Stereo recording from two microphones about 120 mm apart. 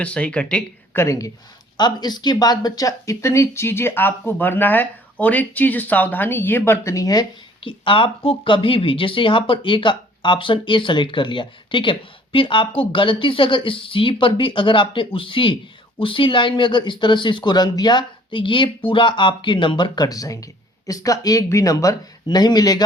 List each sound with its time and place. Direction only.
0.0 s speech: 10° left (ahead or behind)
0.9 s speech: 25° left (ahead or behind)